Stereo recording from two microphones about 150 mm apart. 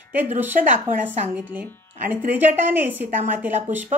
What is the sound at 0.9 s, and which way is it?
A woman's voice, 15° right (ahead or behind).